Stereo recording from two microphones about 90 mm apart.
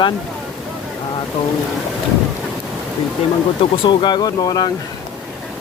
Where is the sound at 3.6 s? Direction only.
60° left (ahead or behind).